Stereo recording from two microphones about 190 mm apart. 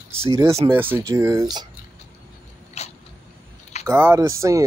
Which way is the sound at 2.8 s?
35° left (ahead or behind).